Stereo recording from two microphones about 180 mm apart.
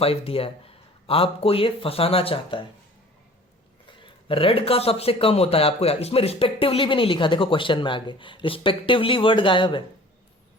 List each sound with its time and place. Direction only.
0.0 s speech: 30° left (ahead or behind)
3.8 s a man's voice: 30° left (ahead or behind)